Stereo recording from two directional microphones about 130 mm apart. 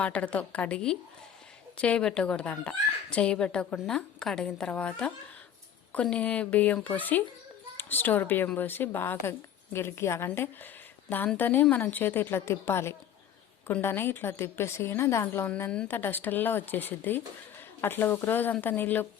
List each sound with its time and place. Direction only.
0.0 s a woman's voice: 10° left (ahead or behind)